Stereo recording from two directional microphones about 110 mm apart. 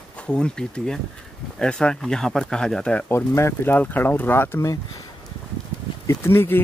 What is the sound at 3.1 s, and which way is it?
Speech, 25° left (ahead or behind).